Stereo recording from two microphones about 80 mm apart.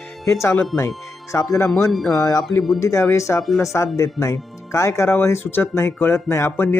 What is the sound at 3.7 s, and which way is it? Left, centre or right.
Speech, left.